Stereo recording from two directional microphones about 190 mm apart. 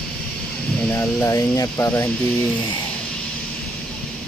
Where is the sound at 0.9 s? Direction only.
15° left (ahead or behind).